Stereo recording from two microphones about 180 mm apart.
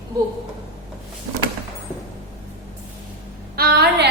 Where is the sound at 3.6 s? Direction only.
60° right (ahead or behind).